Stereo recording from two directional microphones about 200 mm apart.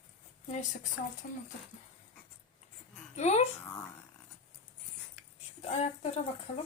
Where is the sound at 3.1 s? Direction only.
35° left (ahead or behind).